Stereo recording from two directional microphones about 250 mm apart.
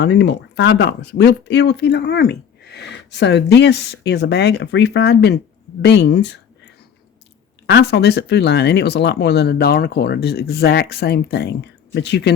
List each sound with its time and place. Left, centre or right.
0.0 s speech: left
7.7 s speech: left